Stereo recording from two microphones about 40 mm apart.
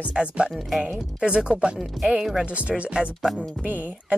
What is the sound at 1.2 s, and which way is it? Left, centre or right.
Speech, right.